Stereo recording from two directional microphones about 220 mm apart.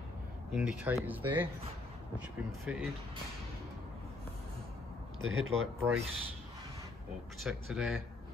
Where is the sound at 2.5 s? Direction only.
10° right (ahead or behind).